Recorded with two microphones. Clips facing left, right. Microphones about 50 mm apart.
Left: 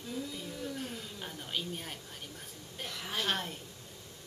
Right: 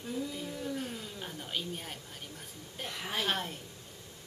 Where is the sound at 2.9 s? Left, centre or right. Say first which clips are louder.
Right 3 dB; right.